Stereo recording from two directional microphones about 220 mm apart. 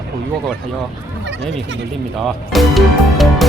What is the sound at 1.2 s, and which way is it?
Speech, 55° right (ahead or behind).